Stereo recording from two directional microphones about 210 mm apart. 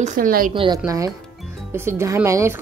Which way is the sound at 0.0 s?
40° right (ahead or behind).